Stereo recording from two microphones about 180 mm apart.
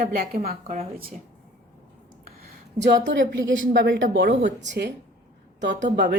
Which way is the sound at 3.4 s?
90° right.